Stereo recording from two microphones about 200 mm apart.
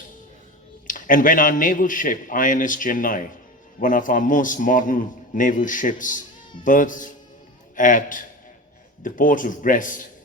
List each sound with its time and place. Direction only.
0.9 s a man's voice: 40° left (ahead or behind)